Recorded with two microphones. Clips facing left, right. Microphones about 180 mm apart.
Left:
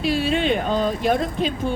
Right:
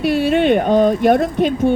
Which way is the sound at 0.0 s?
60° right (ahead or behind).